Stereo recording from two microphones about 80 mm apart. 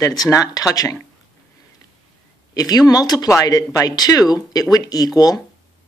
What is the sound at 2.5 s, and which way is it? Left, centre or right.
Speech, left.